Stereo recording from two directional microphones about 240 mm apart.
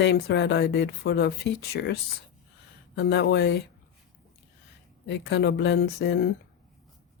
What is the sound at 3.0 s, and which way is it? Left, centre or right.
Speech, left.